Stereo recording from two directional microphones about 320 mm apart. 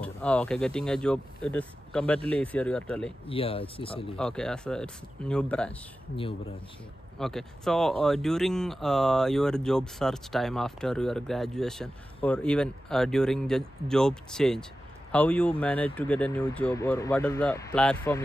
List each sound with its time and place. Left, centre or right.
0.0 s speech: centre
3.3 s speech: centre
4.2 s speech: centre
7.2 s speech: centre